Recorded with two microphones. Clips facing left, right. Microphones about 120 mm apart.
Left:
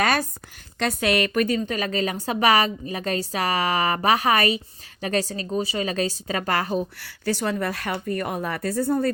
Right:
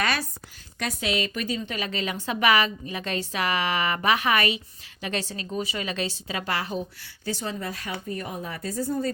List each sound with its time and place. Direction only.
0.0 s a sound: 50° left (ahead or behind)
0.8 s a woman's voice: 55° left (ahead or behind)
7.0 s a woman's voice: 85° left; by 9.0 s 60° left (ahead or behind)